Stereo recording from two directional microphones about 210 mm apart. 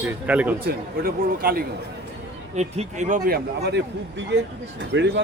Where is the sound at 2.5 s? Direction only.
30° right (ahead or behind).